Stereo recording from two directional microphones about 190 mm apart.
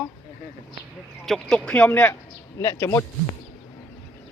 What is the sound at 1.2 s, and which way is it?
Speech, 5° left (ahead or behind).